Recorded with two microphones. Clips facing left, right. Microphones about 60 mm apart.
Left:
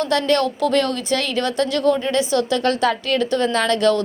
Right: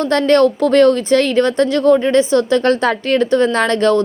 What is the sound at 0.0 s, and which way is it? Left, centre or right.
A woman's voice, right.